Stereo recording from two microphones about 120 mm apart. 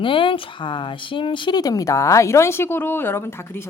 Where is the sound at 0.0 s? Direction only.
45° left (ahead or behind).